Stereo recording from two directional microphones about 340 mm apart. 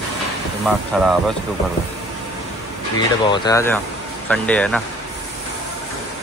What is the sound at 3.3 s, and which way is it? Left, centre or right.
Speech, centre.